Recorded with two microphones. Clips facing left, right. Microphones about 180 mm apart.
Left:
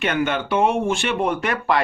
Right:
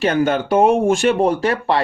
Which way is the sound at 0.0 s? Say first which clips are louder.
Right 5 dB; 35° right (ahead or behind).